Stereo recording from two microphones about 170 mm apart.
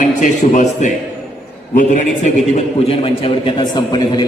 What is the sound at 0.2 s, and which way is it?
A man's voice, 45° left (ahead or behind).